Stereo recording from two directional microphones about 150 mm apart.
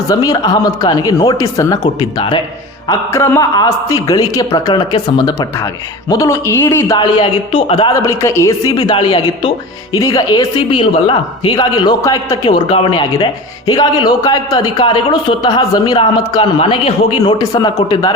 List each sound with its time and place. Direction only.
0.1 s a man's voice: 25° left (ahead or behind)
8.0 s a man's voice: 20° left (ahead or behind); by 16.9 s 35° left (ahead or behind)
17.2 s a man's voice: 25° left (ahead or behind)